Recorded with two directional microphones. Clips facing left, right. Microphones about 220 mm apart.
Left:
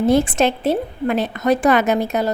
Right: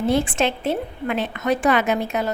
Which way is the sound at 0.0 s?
40° left (ahead or behind).